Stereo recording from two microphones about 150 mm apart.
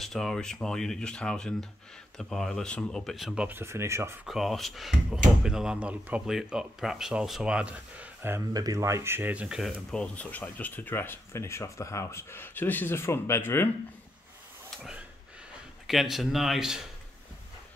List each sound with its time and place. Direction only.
0.0 s speech: centre (ahead or behind)
3.4 s speech: 15° right (ahead or behind)
4.3 s speech: centre (ahead or behind); by 13.7 s 15° left (ahead or behind)
14.8 s a sound: 10° right (ahead or behind)
15.9 s speech: centre (ahead or behind)